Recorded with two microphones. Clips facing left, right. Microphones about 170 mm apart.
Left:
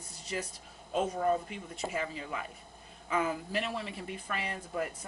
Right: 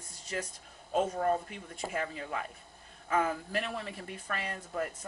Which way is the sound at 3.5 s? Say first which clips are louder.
Left 1 dB; 5° left (ahead or behind).